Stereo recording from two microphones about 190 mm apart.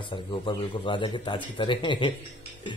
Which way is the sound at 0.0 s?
25° left (ahead or behind).